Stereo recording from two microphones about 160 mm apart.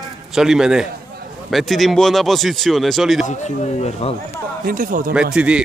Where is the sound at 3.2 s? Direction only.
45° left (ahead or behind).